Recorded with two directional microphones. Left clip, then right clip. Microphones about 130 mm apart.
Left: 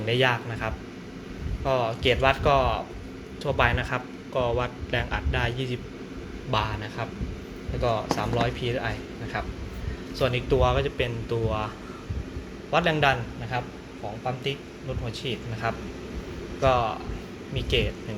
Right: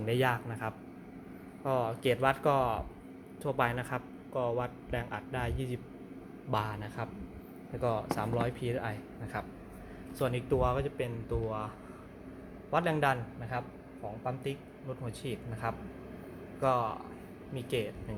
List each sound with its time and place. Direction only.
0.0 s speech: 35° right (ahead or behind); by 11.7 s 10° right (ahead or behind)
12.7 s speech: 25° right (ahead or behind)
15.2 s speech: 30° right (ahead or behind)